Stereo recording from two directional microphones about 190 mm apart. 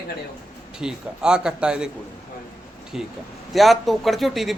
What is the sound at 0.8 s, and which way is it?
Speech, 5° right (ahead or behind).